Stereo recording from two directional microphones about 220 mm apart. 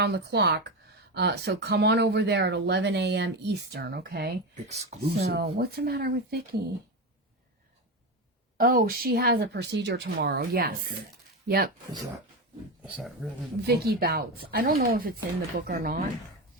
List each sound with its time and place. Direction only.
0.0 s speech: 50° right (ahead or behind)
4.7 s speech: 30° right (ahead or behind)
5.3 s speech: 45° right (ahead or behind)
8.5 s speech: 40° right (ahead or behind)
12.8 s speech: 5° right (ahead or behind)
13.7 s speech: 45° right (ahead or behind)